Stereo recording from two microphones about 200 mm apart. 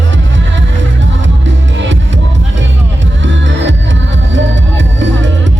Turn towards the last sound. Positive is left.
turn(degrees=-65)  # may be behind; listen again after turning